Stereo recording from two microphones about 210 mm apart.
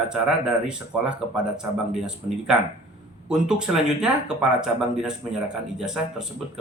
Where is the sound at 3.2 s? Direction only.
5° right (ahead or behind).